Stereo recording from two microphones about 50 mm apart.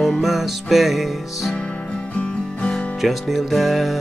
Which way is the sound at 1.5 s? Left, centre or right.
Left.